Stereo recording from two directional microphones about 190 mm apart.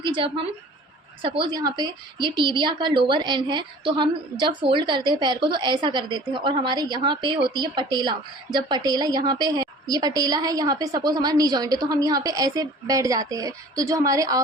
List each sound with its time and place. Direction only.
0.0 s speech: 25° right (ahead or behind)